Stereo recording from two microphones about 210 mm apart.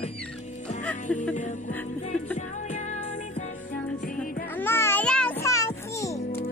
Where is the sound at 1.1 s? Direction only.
5° left (ahead or behind).